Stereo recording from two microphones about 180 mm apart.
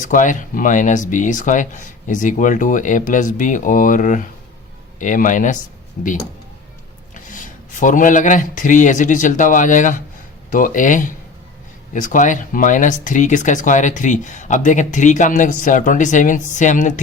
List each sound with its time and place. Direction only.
0.0 s speech: 45° left (ahead or behind)
7.1 s speech: 45° left (ahead or behind)